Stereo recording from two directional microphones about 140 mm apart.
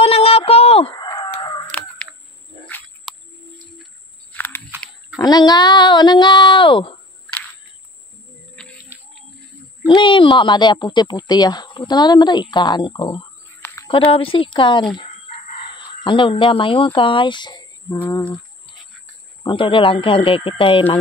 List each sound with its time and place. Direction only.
0.0 s a sound: 45° left (ahead or behind)
1.0 s chicken: 25° left (ahead or behind)
1.3 s chicken: 40° left (ahead or behind)
1.7 s caw: 10° left (ahead or behind)
3.1 s a sound: centre (ahead or behind)
4.3 s chewing: 15° left (ahead or behind)
5.2 s speech: 25° left (ahead or behind)
9.8 s speech: 35° left (ahead or behind)
13.6 s a sound: 20° left (ahead or behind)
14.1 s speech: 40° left (ahead or behind)
18.0 s a sound: 15° left (ahead or behind)
19.4 s speech: 35° left (ahead or behind)